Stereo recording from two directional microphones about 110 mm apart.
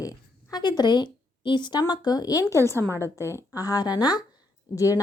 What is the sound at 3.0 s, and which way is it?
A woman's voice, 25° left (ahead or behind).